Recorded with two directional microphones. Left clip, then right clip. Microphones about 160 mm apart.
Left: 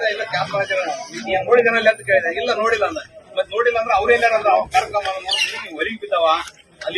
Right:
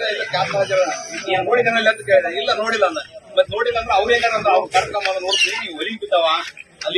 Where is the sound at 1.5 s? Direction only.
Centre (ahead or behind).